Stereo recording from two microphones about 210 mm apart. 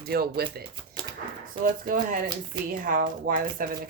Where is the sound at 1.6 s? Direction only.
40° right (ahead or behind).